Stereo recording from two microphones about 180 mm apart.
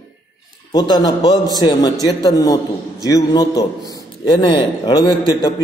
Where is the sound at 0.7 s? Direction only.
25° left (ahead or behind).